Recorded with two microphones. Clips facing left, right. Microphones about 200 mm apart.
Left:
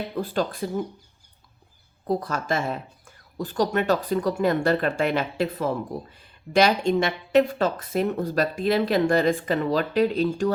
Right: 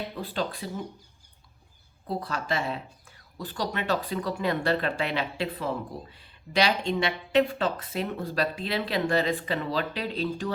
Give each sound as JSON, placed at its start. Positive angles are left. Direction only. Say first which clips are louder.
{"t": 0.2, "sound": "speech", "louder": "left 7 dB", "side_deg": 45}
{"t": 2.0, "sound": "speech", "louder": "left 5 dB", "side_deg": 45}